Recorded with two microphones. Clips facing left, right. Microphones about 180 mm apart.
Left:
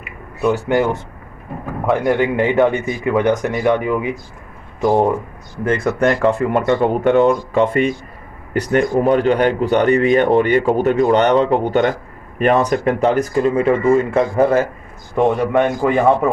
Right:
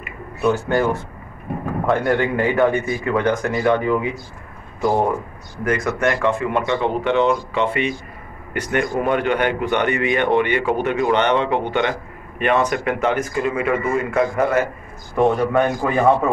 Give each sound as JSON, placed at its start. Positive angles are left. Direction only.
{"t": 0.4, "sound": "speech", "side_deg": 15}
{"t": 2.0, "sound": "a man's voice", "side_deg": 15}